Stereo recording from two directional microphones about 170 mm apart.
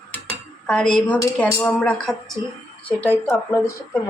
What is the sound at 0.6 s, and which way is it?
A woman's voice, 5° left (ahead or behind).